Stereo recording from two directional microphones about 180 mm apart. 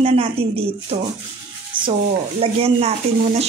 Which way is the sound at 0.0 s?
35° right (ahead or behind).